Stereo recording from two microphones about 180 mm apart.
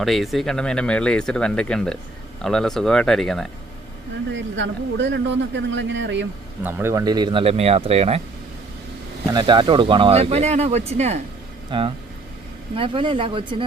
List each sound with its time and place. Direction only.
0.0 s speech: centre (ahead or behind)
4.3 s speech: 90° right
6.6 s speech: 10° right (ahead or behind); by 8.2 s 35° right (ahead or behind)
9.2 s speech: 25° right (ahead or behind)